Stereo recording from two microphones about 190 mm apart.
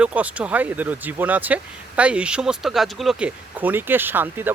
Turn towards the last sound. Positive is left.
turn(degrees=-10)  # may be behind; listen again after turning